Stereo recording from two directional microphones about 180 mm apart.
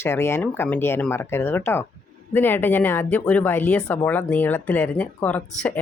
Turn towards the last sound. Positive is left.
turn(degrees=10)  # may be behind; listen again after turning